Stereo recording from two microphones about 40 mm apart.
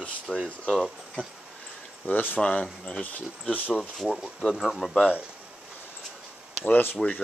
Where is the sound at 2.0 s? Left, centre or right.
Left.